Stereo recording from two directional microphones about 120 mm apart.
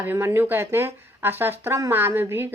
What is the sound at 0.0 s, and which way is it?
Speech, 15° right (ahead or behind).